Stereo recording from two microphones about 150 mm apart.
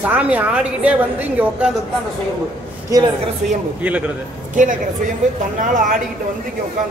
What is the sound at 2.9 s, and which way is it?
Speech, 30° right (ahead or behind).